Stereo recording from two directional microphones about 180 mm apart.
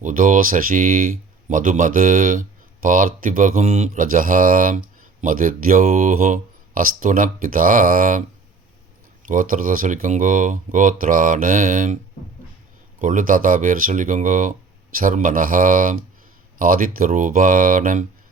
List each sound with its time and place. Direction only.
0.0 s speech: 45° right (ahead or behind)
9.2 s speech: 50° right (ahead or behind)
13.0 s speech: 45° right (ahead or behind)